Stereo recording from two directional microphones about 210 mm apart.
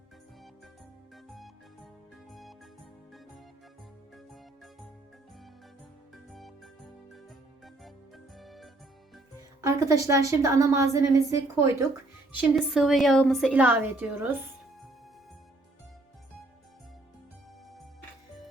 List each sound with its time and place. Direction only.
1.1 s music: centre (ahead or behind)
4.1 s music: centre (ahead or behind)
6.1 s music: centre (ahead or behind)
9.6 s a woman's voice: 15° right (ahead or behind)
12.4 s a woman's voice: centre (ahead or behind)